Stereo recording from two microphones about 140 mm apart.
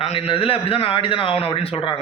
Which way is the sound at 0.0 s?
40° left (ahead or behind).